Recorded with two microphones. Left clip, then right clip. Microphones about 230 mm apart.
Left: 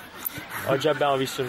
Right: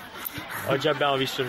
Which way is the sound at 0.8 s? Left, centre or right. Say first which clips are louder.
Left 1 dB; left.